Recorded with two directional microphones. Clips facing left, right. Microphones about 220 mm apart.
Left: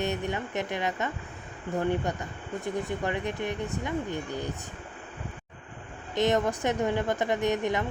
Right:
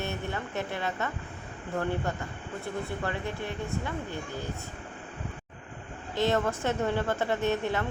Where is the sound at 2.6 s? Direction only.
15° left (ahead or behind).